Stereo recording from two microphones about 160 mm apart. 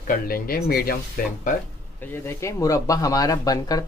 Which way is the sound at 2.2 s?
20° left (ahead or behind).